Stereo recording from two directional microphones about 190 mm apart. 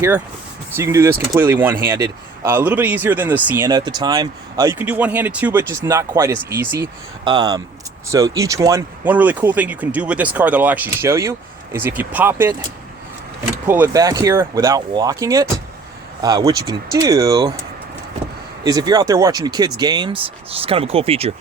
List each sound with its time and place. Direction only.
0.8 s a man's voice: 15° right (ahead or behind)
13.7 s a man's voice: 10° right (ahead or behind)
18.6 s speech: 20° right (ahead or behind)